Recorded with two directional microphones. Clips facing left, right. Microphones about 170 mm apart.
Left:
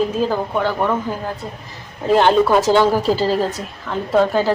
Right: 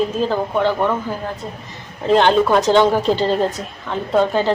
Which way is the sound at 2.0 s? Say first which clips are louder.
Even; 5° left (ahead or behind).